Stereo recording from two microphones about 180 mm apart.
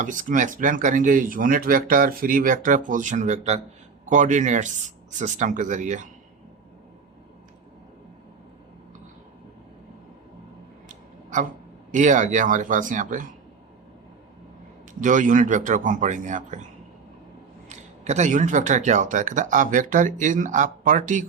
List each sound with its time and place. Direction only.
0.0 s speech: 45° right (ahead or behind)
10.8 s a sound: 45° right (ahead or behind)
11.9 s speech: 45° right (ahead or behind)
15.0 s speech: 45° right (ahead or behind)
17.7 s speech: 40° right (ahead or behind)